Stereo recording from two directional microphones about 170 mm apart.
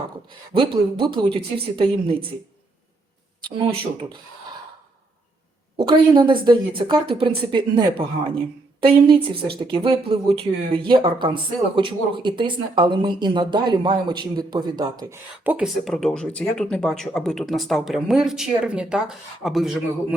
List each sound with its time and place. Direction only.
0.3 s a woman's voice: 30° right (ahead or behind)
3.4 s a woman's voice: 35° right (ahead or behind)
5.7 s speech: 30° right (ahead or behind)
15.4 s speech: 5° right (ahead or behind)